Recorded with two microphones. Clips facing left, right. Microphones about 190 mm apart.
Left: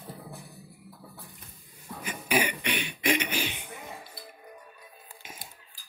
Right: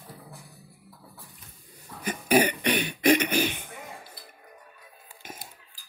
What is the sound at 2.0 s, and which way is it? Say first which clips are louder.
Cough: right 6 dB; 40° right (ahead or behind).